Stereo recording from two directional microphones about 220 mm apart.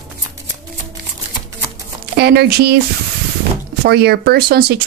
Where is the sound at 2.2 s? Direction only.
45° right (ahead or behind).